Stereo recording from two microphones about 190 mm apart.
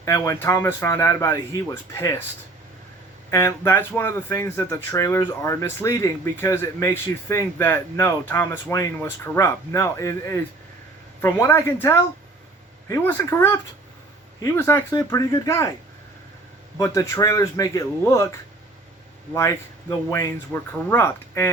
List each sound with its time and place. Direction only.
0.0 s speech: 15° left (ahead or behind)
3.2 s speech: 15° left (ahead or behind)
16.7 s speech: 15° left (ahead or behind)
19.3 s speech: 15° left (ahead or behind)